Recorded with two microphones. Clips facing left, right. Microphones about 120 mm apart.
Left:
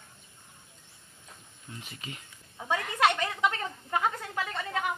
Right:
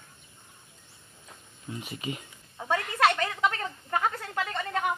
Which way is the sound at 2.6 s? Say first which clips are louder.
Right 1 dB; 15° left (ahead or behind).